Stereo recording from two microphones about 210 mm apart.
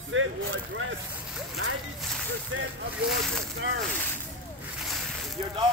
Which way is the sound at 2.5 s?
75° right (ahead or behind).